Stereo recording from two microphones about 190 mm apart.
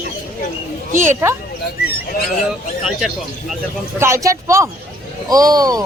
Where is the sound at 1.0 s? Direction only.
15° right (ahead or behind).